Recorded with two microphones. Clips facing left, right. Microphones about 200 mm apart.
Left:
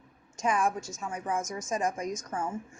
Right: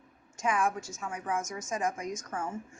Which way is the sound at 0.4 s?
35° left (ahead or behind).